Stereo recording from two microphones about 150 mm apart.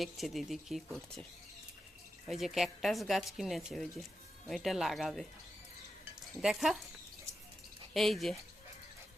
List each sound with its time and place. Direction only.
0.0 s speech: centre (ahead or behind)
6.4 s speech: 5° right (ahead or behind)
7.9 s speech: centre (ahead or behind)